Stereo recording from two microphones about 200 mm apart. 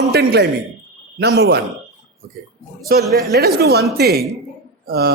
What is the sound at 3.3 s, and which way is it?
A man's voice, 50° right (ahead or behind).